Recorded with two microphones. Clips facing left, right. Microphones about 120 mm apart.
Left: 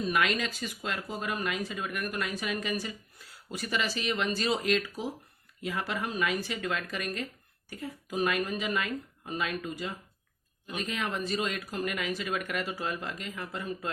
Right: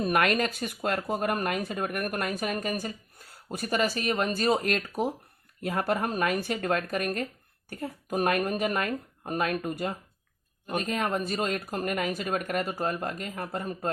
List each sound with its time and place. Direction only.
0.0 s speech: 55° right (ahead or behind)